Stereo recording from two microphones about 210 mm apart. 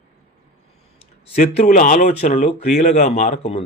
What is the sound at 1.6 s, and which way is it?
Speech, 35° left (ahead or behind).